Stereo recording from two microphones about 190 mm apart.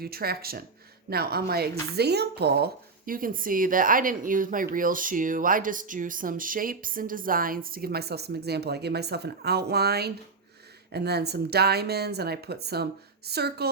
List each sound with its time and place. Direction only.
0.0 s speech: 55° right (ahead or behind)
3.1 s speech: 45° right (ahead or behind)